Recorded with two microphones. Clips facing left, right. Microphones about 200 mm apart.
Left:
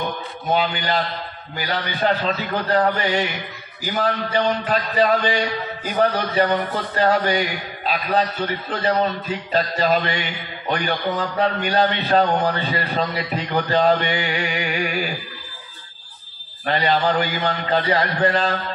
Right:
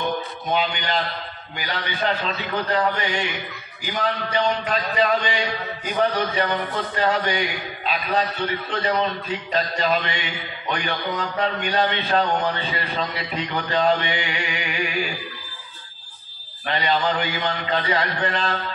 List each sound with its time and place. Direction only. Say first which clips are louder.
0.5 s a man's voice: left 3 dB; 40° left (ahead or behind)
16.6 s a man's voice: left 3 dB; 45° left (ahead or behind)